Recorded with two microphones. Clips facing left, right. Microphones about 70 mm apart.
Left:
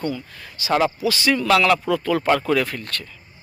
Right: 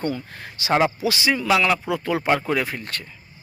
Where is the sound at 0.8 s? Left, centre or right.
Right.